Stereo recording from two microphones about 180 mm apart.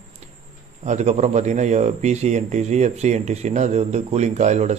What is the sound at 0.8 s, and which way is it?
A man's voice, 40° right (ahead or behind).